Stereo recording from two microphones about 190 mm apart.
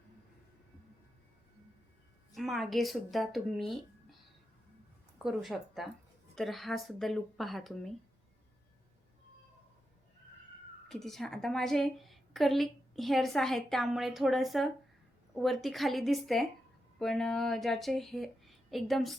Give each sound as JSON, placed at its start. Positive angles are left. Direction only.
{"t": 2.3, "sound": "a woman's voice", "side_deg": 0}
{"t": 5.2, "sound": "a woman's voice", "side_deg": 0}
{"t": 10.8, "sound": "a woman's voice", "side_deg": 0}